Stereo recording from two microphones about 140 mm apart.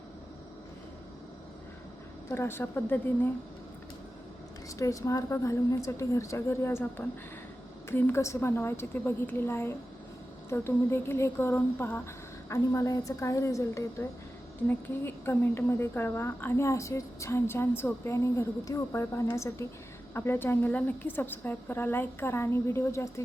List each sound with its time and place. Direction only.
2.3 s a woman's voice: 15° left (ahead or behind)
4.8 s a woman's voice: 25° left (ahead or behind)